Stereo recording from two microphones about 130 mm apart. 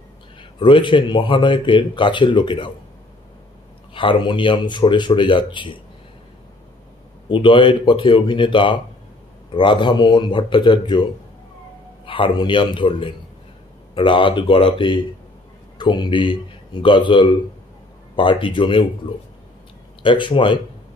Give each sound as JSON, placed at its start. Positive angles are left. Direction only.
{"t": 0.4, "sound": "speech", "side_deg": 40}
{"t": 3.9, "sound": "speech", "side_deg": 40}
{"t": 7.2, "sound": "speech", "side_deg": 40}
{"t": 12.1, "sound": "speech", "side_deg": 40}
{"t": 20.0, "sound": "speech", "side_deg": 40}